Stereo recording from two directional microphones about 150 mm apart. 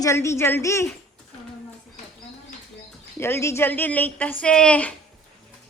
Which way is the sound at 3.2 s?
15° left (ahead or behind).